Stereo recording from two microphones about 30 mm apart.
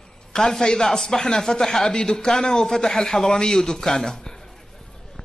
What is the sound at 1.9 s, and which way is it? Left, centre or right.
A man's voice, left.